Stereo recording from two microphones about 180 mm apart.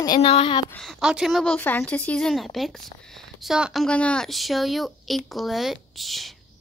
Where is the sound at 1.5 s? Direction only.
10° left (ahead or behind).